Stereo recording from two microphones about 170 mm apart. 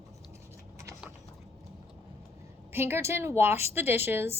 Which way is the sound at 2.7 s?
15° right (ahead or behind).